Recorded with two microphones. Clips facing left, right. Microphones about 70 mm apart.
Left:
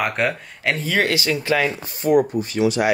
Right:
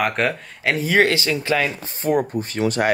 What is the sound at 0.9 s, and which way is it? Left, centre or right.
Speech, right.